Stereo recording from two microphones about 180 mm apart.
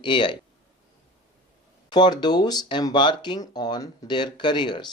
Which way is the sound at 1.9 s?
25° left (ahead or behind).